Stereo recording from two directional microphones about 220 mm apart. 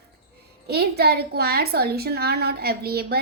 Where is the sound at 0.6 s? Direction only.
45° right (ahead or behind).